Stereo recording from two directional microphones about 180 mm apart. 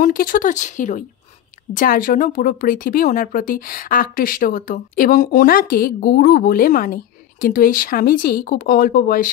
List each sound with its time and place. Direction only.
0.0 s speech: 55° left (ahead or behind)